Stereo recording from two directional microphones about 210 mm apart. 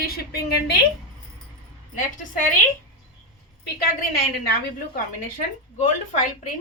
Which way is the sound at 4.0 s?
45° left (ahead or behind).